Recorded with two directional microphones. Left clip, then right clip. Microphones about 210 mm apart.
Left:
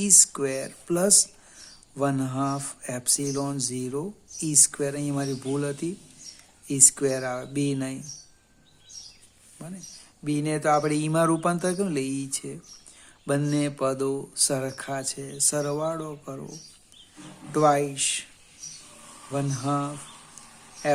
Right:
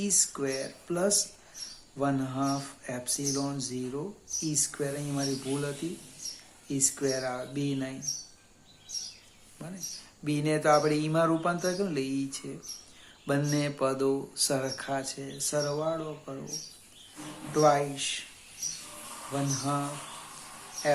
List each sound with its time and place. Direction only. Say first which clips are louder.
0.0 s speech: left 7 dB; 50° left (ahead or behind)
9.6 s speech: right 2 dB; 40° left (ahead or behind)
17.5 s speech: left 3 dB; 45° left (ahead or behind)
19.3 s speech: left 3 dB; 45° left (ahead or behind)